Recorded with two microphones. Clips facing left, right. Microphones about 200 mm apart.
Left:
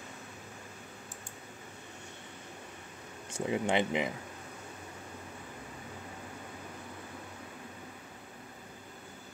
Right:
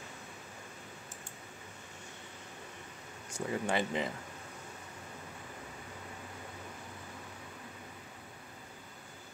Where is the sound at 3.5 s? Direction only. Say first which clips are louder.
Left 3 dB; 20° left (ahead or behind).